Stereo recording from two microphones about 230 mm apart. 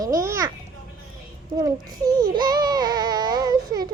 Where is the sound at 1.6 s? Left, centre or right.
Centre.